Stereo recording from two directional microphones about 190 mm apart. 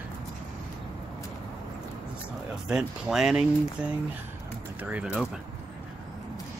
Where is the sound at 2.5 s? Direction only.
5° right (ahead or behind).